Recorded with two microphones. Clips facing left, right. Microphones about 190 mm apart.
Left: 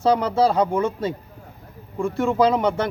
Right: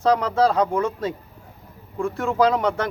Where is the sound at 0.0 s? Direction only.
Centre (ahead or behind).